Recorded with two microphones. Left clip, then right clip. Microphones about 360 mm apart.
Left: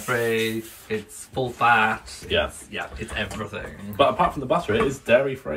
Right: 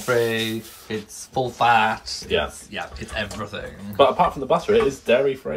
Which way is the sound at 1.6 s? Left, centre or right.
Centre.